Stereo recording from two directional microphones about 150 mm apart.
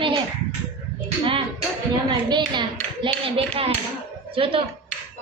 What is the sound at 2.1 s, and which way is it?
A woman's voice, 30° right (ahead or behind).